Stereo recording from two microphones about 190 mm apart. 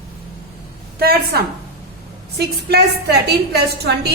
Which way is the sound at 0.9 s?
55° right (ahead or behind).